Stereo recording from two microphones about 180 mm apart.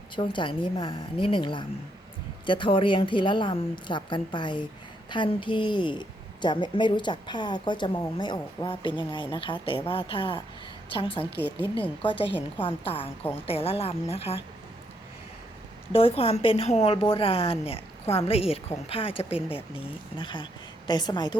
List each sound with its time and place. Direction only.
0.2 s a woman's voice: 25° left (ahead or behind)
11.3 s a woman's voice: 65° left (ahead or behind)
12.4 s a woman's voice: 30° left (ahead or behind)
15.9 s a woman's voice: 30° left (ahead or behind)